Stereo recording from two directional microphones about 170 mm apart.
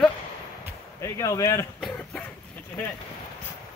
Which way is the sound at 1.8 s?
Centre (ahead or behind).